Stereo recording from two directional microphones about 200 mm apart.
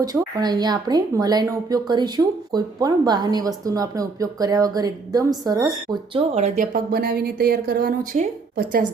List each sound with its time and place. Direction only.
0.0 s speech: 20° right (ahead or behind); by 8.9 s 40° right (ahead or behind)